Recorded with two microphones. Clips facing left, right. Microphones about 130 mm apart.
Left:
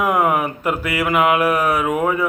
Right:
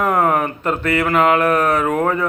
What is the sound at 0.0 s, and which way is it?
Speech, 10° left (ahead or behind).